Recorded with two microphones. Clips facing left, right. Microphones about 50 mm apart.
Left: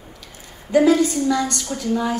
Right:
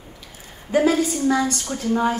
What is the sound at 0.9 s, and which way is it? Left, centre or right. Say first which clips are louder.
Speech: left 2 dB; left.